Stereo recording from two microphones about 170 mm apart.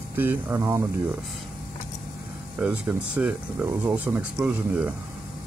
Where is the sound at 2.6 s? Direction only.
5° right (ahead or behind).